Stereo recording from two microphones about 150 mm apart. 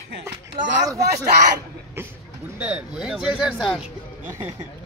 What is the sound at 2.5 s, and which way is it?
Speech, 10° right (ahead or behind).